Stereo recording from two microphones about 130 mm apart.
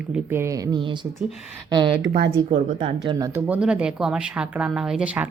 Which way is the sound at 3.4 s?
10° right (ahead or behind).